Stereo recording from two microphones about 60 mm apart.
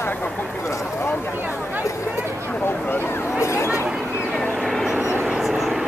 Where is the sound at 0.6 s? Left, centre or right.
Left.